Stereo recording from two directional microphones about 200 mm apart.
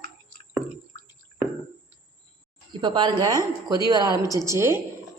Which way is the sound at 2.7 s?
20° right (ahead or behind).